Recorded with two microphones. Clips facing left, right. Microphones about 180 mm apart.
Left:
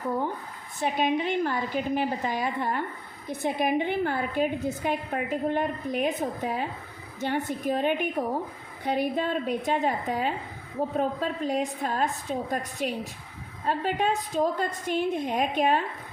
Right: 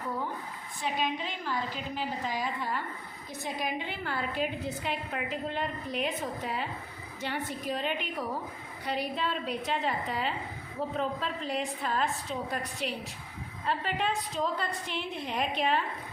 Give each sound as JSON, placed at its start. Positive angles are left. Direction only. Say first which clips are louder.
{"t": 0.8, "sound": "a woman's voice", "louder": "left 7 dB", "side_deg": 55}